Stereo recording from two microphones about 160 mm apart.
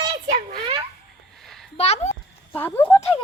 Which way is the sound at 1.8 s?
40° left (ahead or behind).